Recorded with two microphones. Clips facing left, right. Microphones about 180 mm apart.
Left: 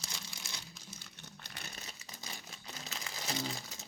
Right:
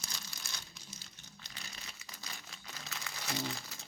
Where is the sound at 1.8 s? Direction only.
25° left (ahead or behind).